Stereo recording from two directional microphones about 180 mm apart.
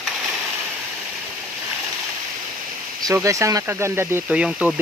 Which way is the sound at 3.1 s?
15° right (ahead or behind).